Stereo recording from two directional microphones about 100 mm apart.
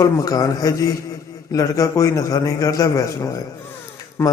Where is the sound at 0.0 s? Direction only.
35° left (ahead or behind).